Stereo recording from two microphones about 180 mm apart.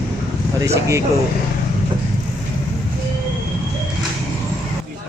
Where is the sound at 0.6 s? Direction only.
15° right (ahead or behind).